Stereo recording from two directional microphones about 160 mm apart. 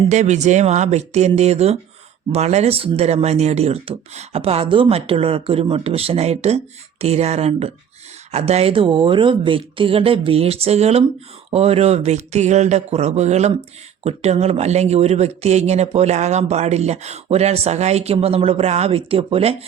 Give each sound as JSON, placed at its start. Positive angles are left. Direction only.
{"t": 0.1, "sound": "speech", "side_deg": -45}